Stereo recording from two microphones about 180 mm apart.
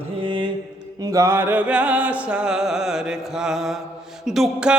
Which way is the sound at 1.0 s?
20° right (ahead or behind).